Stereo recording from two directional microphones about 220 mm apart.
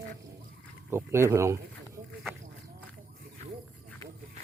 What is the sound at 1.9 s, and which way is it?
Snake, 5° right (ahead or behind).